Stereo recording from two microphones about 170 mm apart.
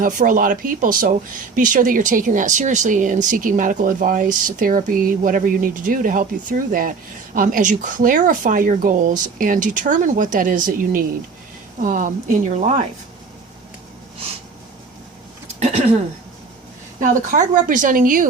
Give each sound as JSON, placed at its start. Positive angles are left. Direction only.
{"t": 0.0, "sound": "speech", "side_deg": -55}
{"t": 17.0, "sound": "speech", "side_deg": -50}